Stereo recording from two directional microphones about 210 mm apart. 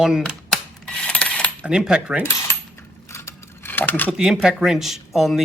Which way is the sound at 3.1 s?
10° left (ahead or behind).